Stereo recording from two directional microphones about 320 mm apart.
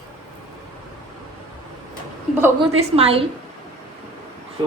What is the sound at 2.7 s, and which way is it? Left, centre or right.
Speech, centre.